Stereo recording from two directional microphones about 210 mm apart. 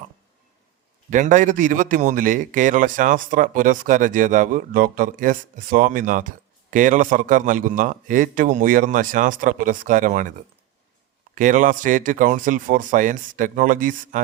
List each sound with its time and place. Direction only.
1.1 s a man's voice: 35° right (ahead or behind)
11.3 s a man's voice: 40° right (ahead or behind)